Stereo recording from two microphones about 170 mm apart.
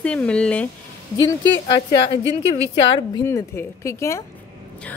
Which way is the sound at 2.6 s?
90° left.